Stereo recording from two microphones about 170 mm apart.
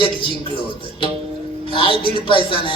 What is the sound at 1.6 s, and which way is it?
A man's voice, 30° left (ahead or behind).